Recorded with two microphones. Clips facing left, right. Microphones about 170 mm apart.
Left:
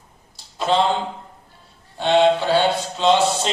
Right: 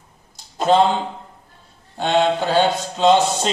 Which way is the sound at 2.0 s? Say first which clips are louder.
Left 2 dB; 45° right (ahead or behind).